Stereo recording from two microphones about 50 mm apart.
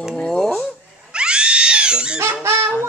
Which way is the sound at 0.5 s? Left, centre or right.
Centre.